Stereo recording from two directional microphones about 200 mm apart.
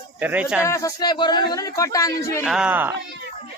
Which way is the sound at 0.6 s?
15° left (ahead or behind).